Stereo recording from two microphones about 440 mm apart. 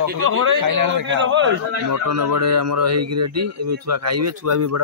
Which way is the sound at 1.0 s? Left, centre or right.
Right.